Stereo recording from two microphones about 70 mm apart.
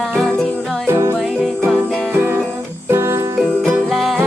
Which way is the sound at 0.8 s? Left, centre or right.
Right.